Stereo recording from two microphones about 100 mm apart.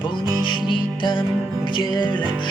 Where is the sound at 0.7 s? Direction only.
55° left (ahead or behind).